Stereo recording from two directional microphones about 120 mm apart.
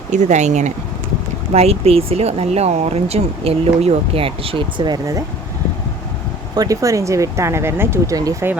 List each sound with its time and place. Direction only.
0.1 s speech: 80° right
1.5 s speech: 60° right (ahead or behind)
6.6 s speech: 30° right (ahead or behind)